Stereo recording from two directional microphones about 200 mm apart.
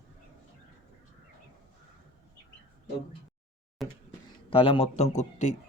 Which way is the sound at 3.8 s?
Centre (ahead or behind).